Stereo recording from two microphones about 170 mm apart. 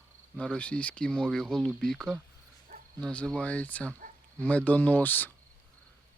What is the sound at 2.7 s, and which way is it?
Insect, 45° right (ahead or behind).